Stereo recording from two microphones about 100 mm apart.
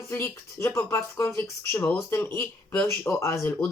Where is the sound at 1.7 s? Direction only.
15° left (ahead or behind).